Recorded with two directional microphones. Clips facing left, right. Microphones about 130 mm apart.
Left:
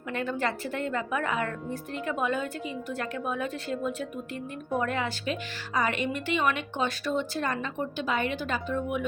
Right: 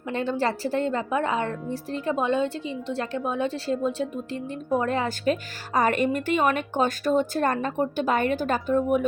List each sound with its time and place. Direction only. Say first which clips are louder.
0.1 s a woman's voice: right 4 dB; 30° right (ahead or behind)